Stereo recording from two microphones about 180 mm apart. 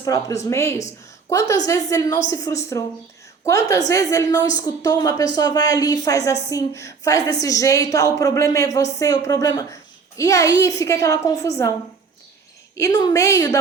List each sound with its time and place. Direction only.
0.0 s a woman's voice: 20° left (ahead or behind)
12.7 s a woman's voice: 20° left (ahead or behind)